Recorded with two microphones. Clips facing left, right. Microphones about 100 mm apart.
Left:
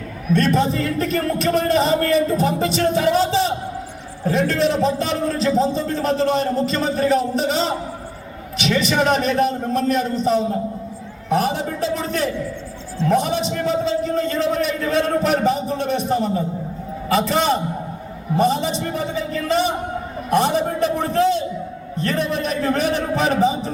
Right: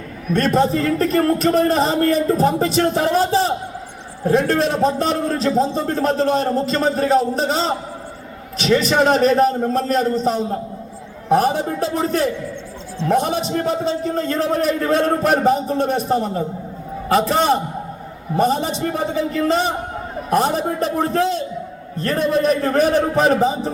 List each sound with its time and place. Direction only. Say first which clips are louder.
0.3 s a man's voice: right 2 dB; 45° right (ahead or behind)